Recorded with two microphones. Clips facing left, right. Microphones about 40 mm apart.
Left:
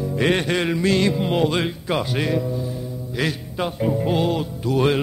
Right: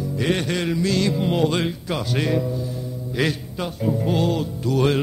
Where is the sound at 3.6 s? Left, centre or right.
Centre.